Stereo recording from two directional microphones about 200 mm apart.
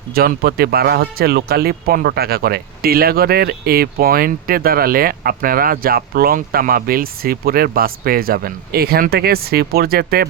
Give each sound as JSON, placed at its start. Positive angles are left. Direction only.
{"t": 0.1, "sound": "speech", "side_deg": -50}